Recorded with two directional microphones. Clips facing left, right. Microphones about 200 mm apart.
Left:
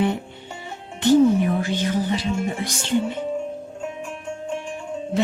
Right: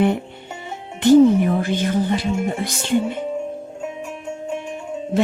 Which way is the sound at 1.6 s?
55° right (ahead or behind).